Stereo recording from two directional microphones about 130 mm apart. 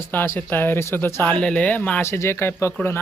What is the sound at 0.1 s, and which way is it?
Speech, 15° left (ahead or behind).